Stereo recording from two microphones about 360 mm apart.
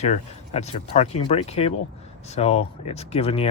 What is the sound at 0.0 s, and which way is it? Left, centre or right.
Speech, centre.